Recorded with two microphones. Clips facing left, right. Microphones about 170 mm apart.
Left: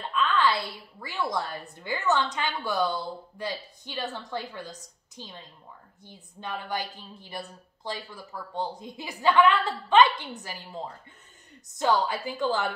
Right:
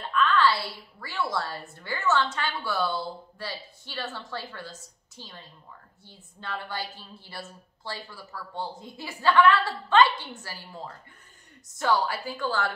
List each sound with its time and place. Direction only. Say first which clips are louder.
0.0 s a woman's voice: right 2 dB; 20° left (ahead or behind)
11.8 s speech: left 1 dB; 20° left (ahead or behind)